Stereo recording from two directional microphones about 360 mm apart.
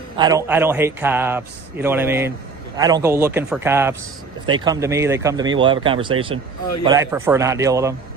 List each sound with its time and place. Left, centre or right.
0.2 s a man's voice: centre